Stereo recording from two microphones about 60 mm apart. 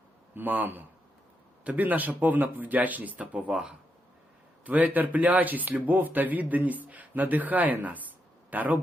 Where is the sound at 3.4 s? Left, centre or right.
Centre.